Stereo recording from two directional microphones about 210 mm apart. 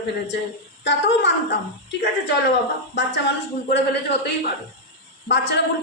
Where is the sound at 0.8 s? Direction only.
55° left (ahead or behind).